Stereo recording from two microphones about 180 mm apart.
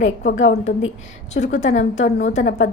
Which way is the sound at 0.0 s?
80° left.